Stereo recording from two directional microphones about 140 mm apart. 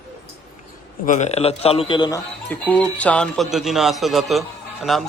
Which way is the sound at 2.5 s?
10° left (ahead or behind).